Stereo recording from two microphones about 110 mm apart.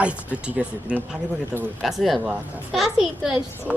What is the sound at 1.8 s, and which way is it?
A woman's voice, centre (ahead or behind).